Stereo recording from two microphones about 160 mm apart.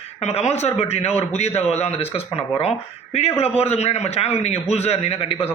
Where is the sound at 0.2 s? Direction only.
40° left (ahead or behind).